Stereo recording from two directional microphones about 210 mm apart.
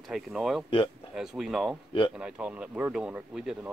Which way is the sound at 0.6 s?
25° left (ahead or behind).